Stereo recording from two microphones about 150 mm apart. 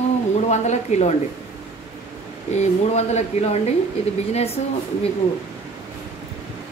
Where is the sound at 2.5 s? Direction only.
50° left (ahead or behind).